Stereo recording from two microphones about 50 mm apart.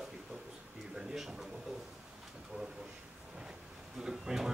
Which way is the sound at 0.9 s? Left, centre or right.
Centre.